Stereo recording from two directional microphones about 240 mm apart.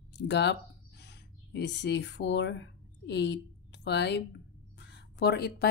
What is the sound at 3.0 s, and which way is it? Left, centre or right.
A woman's voice, left.